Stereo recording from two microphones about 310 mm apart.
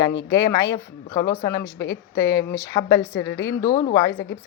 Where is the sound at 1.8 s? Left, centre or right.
Left.